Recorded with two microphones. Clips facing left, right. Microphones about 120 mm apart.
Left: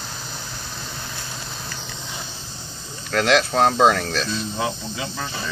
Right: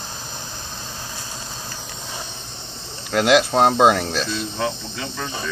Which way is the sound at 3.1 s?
15° right (ahead or behind).